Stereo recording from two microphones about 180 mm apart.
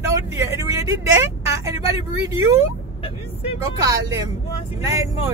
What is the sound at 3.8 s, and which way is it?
Speech, 20° right (ahead or behind).